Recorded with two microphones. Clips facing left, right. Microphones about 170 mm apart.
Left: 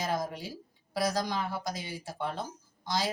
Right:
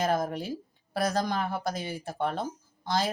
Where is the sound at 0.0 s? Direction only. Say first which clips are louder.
Right 5 dB; 55° right (ahead or behind).